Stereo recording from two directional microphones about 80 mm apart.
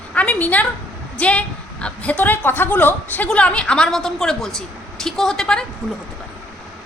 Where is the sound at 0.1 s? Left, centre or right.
Centre.